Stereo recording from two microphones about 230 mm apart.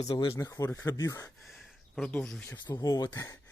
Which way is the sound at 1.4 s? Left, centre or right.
Centre.